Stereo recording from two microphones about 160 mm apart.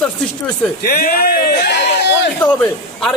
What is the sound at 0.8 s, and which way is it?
Speech, 70° left (ahead or behind).